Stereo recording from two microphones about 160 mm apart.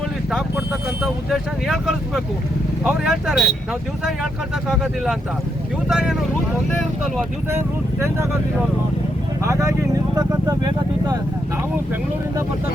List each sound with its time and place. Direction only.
0.3 s speech: 5° right (ahead or behind)
7.5 s speech: 15° right (ahead or behind)
9.4 s speech: 20° right (ahead or behind)